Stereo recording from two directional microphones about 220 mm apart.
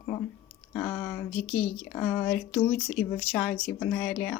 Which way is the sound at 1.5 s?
25° left (ahead or behind).